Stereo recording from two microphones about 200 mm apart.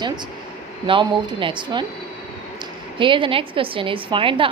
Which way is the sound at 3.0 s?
25° right (ahead or behind).